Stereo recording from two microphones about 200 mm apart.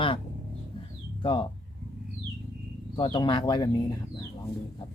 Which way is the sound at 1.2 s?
25° left (ahead or behind).